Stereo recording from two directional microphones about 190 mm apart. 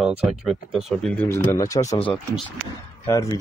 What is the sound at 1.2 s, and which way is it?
Speech, 15° left (ahead or behind).